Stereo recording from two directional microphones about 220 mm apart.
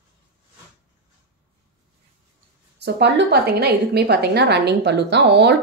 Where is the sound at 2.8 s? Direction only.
50° right (ahead or behind).